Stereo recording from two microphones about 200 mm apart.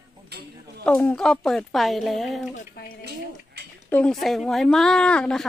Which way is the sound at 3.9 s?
10° left (ahead or behind).